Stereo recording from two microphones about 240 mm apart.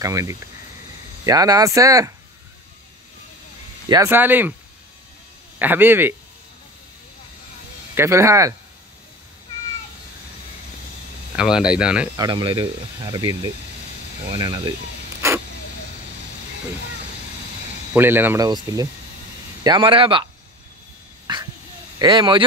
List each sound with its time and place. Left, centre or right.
0.0 s speech: centre
3.9 s speech: centre
5.6 s speech: centre
7.9 s speech: centre
11.3 s speech: centre
12.2 s speech: centre
17.9 s speech: centre
21.3 s dog: centre
21.9 s speech: centre